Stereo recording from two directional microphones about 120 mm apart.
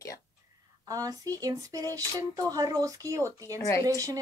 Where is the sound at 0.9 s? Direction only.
30° right (ahead or behind).